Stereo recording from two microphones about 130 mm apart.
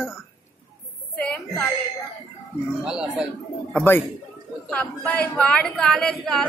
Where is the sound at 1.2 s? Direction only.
5° left (ahead or behind).